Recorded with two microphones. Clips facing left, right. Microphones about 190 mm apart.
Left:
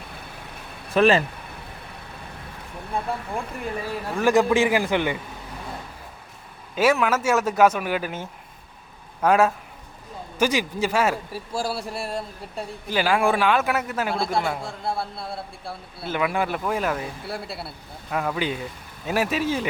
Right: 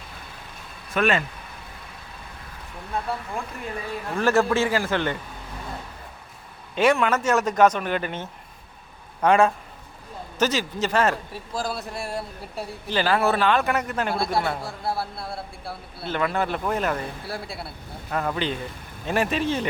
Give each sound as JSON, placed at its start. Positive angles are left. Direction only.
{"t": 0.9, "sound": "speech", "side_deg": 35}
{"t": 4.2, "sound": "a man's voice", "side_deg": 15}
{"t": 6.7, "sound": "a man's voice", "side_deg": 5}
{"t": 12.9, "sound": "a man's voice", "side_deg": 10}
{"t": 16.1, "sound": "a man's voice", "side_deg": 10}